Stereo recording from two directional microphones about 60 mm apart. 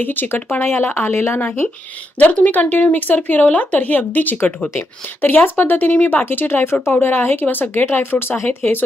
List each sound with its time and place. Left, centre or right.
0.0 s speech: left
1.4 s speech: left
4.7 s speech: left